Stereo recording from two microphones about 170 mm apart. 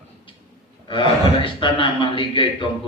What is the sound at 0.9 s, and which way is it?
A man's voice, 30° left (ahead or behind).